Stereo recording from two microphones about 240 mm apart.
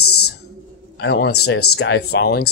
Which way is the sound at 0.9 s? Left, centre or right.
Left.